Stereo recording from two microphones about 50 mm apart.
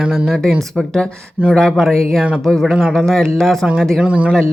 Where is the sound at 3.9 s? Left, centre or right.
Right.